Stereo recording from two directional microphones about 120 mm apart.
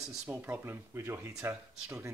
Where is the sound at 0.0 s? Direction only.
5° right (ahead or behind).